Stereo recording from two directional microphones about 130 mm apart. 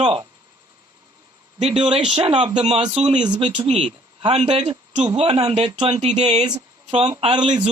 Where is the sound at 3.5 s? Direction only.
50° right (ahead or behind).